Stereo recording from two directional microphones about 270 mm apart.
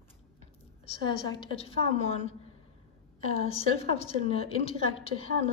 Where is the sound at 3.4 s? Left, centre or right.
Left.